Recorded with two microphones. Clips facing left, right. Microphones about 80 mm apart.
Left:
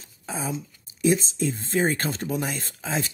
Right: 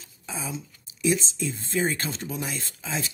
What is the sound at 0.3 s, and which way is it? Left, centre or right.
Speech, left.